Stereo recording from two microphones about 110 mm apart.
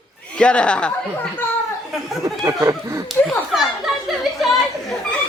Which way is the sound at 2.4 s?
30° right (ahead or behind).